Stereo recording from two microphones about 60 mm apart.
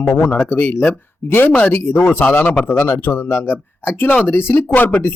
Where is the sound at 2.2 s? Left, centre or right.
Left.